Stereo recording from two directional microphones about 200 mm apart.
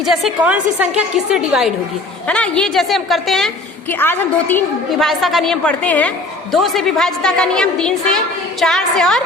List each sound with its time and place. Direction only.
0.0 s a woman's voice: centre (ahead or behind)